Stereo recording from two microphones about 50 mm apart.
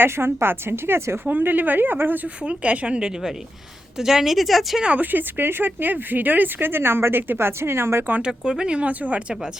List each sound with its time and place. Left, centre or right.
0.0 s speech: right
1.2 s speech: right
2.4 s speech: right
3.9 s speech: centre
4.9 s speech: right
8.3 s speech: centre